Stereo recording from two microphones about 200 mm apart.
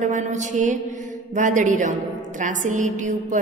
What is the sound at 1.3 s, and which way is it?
A woman's voice, 40° right (ahead or behind).